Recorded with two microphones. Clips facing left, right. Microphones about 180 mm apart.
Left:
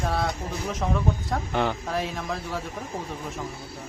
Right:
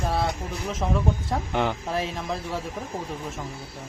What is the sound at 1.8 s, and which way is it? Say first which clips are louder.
Speech: right 1 dB; centre (ahead or behind).